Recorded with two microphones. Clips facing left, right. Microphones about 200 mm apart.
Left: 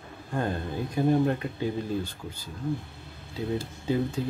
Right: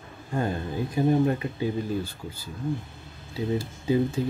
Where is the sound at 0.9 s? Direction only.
5° right (ahead or behind).